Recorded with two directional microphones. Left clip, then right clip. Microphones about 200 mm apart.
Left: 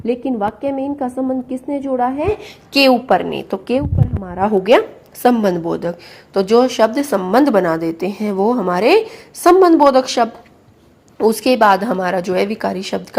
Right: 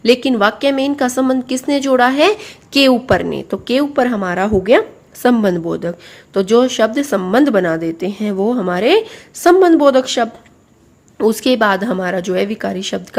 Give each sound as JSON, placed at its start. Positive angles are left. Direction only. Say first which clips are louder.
{"t": 0.0, "sound": "a woman's voice", "louder": "right 7 dB", "side_deg": -35}
{"t": 2.7, "sound": "a woman's voice", "louder": "even", "side_deg": -30}
{"t": 4.6, "sound": "a woman's voice", "louder": "left 1 dB", "side_deg": -25}